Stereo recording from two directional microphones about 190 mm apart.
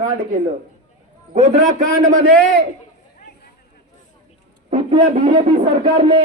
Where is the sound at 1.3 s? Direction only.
35° right (ahead or behind).